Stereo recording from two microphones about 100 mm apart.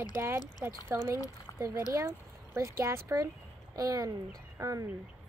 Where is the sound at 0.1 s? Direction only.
25° right (ahead or behind).